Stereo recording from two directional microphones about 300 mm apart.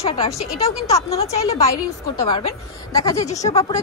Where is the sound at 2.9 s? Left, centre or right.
Centre.